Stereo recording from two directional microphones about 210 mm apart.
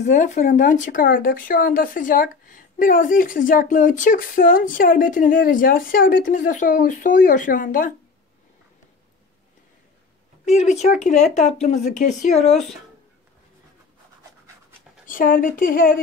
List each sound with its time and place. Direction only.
0.0 s speech: 35° left (ahead or behind)
10.4 s speech: 35° left (ahead or behind)
15.0 s speech: 40° left (ahead or behind)